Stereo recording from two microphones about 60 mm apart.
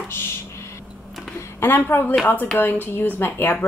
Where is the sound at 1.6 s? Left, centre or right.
Left.